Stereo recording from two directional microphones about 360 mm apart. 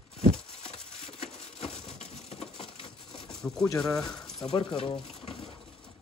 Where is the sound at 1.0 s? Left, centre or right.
Centre.